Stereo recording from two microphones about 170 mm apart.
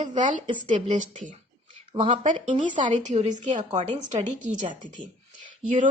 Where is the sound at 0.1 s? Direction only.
45° right (ahead or behind).